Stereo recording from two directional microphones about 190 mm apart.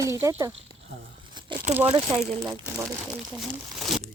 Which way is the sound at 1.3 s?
25° right (ahead or behind).